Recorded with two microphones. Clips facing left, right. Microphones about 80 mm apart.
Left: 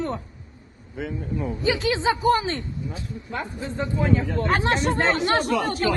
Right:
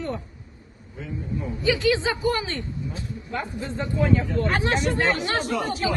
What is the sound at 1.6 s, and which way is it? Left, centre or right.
A man's voice, left.